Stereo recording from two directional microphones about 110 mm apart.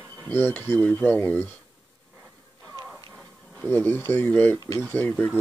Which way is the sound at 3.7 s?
20° left (ahead or behind).